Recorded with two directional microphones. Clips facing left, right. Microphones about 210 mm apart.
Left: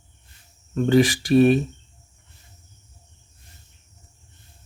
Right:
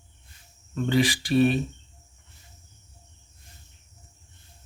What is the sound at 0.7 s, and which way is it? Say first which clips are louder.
Speech: left 6 dB; 45° left (ahead or behind).